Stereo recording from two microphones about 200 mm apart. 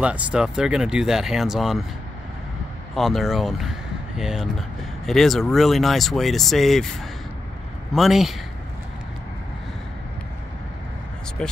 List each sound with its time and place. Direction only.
0.0 s speech: 5° right (ahead or behind)
3.0 s speech: centre (ahead or behind)